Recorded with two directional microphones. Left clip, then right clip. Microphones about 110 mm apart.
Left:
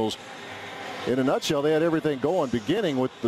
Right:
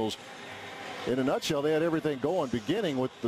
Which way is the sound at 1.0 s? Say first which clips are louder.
Left 5 dB; 35° right (ahead or behind).